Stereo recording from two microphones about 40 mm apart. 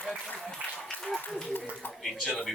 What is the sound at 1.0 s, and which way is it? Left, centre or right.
Speech, centre.